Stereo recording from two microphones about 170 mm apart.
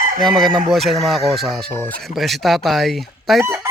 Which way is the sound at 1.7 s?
10° left (ahead or behind).